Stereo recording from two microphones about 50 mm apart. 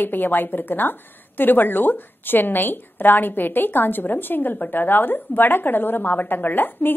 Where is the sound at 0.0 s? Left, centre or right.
Left.